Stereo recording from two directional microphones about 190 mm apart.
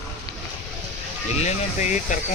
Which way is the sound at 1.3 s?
35° left (ahead or behind).